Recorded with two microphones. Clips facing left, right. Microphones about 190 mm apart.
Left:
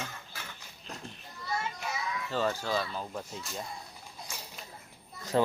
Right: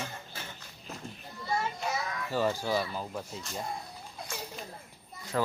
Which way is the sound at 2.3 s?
10° right (ahead or behind).